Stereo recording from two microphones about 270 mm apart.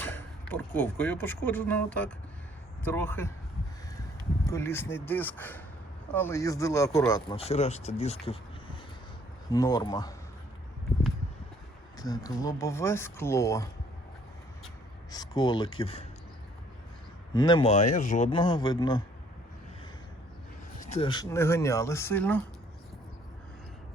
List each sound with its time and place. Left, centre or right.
0.0 s speech: centre
4.4 s speech: centre
9.5 s speech: centre
11.9 s speech: centre
15.1 s speech: centre
17.3 s speech: centre
20.9 s speech: centre